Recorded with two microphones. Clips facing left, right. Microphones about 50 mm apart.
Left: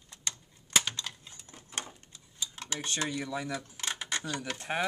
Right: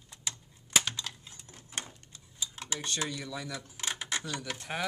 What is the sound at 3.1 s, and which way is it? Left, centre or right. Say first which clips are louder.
Speech: left 4 dB; left.